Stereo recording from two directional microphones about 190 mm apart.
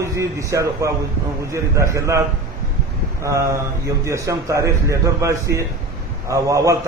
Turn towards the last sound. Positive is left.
turn(degrees=-15)  # may be behind; listen again after turning